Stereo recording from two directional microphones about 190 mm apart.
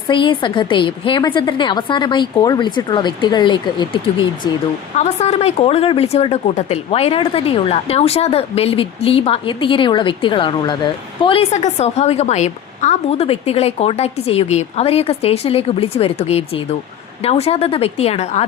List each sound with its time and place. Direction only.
0.1 s a woman's voice: 25° left (ahead or behind)
4.9 s speech: 35° left (ahead or behind)